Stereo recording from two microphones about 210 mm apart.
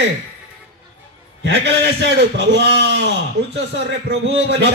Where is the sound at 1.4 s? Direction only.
55° right (ahead or behind).